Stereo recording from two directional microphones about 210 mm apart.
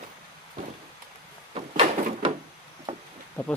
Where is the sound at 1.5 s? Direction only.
30° right (ahead or behind).